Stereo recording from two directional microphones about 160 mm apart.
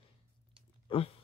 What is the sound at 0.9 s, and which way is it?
Speech, 35° left (ahead or behind).